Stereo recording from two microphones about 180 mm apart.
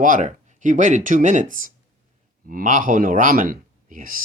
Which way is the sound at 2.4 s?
50° right (ahead or behind).